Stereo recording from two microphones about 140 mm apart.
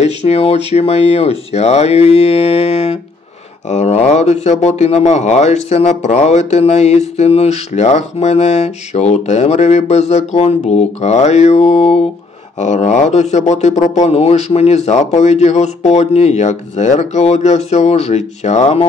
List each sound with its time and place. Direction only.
0.0 s speech: 50° left (ahead or behind)